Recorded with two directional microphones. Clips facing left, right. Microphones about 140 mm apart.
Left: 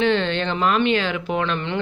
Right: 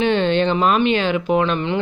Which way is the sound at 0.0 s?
15° right (ahead or behind).